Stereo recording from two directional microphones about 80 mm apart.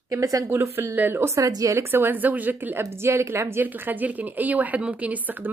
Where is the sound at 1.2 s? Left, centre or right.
Right.